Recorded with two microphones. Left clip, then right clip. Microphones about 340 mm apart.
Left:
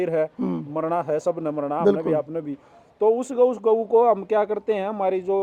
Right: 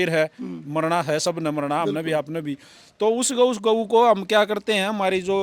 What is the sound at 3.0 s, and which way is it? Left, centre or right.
Speech, right.